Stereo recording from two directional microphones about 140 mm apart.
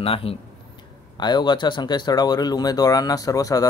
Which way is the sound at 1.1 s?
30° left (ahead or behind).